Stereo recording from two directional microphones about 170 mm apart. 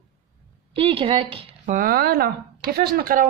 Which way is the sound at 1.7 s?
55° right (ahead or behind).